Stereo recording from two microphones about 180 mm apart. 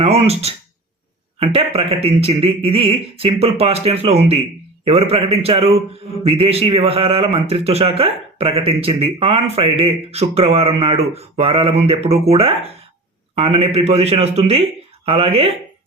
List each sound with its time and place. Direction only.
0.0 s a man's voice: 35° right (ahead or behind)